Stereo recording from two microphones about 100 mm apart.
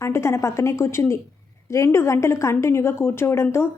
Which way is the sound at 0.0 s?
30° left (ahead or behind).